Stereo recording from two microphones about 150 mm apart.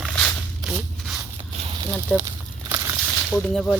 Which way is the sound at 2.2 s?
25° right (ahead or behind).